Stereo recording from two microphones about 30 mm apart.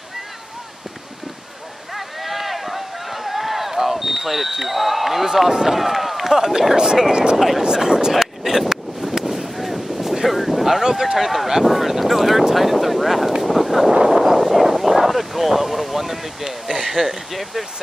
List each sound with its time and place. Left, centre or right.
2.0 s boat: centre
5.5 s speech: centre
6.3 s speech: centre
7.3 s speech: centre
7.6 s speech: right
8.1 s a sound: centre
10.2 s boat: centre
10.8 s speech: centre
13.4 s a sound: centre
16.9 s speech: centre